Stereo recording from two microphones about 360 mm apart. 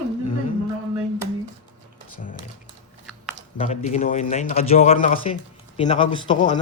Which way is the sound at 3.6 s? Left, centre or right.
Centre.